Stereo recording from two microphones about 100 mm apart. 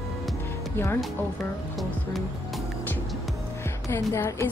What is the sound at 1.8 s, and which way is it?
Music, centre (ahead or behind).